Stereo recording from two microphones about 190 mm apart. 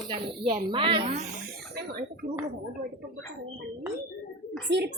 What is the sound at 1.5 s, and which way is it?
Speech, 60° right (ahead or behind).